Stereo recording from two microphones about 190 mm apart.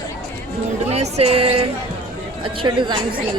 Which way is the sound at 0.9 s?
35° right (ahead or behind).